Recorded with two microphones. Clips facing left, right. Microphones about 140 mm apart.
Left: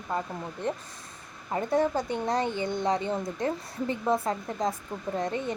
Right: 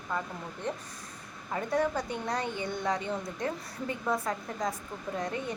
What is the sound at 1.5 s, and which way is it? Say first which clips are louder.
Speech: left 4 dB; 25° left (ahead or behind).